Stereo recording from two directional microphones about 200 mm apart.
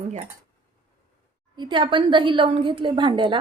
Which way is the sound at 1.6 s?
25° right (ahead or behind).